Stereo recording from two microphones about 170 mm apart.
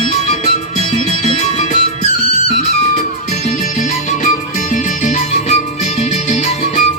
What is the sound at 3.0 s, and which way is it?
Music, 45° left (ahead or behind).